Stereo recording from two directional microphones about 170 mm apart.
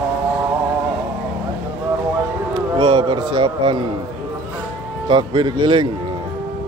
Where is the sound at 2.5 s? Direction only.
25° right (ahead or behind).